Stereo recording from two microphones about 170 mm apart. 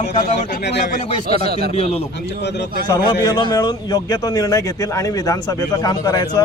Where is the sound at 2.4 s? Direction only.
80° left.